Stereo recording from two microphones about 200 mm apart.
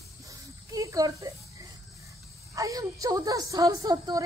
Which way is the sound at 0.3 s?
15° right (ahead or behind).